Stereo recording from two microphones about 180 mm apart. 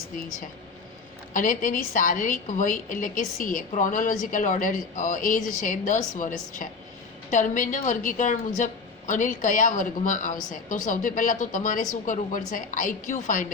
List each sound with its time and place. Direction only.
1.3 s a woman's voice: 45° left (ahead or behind)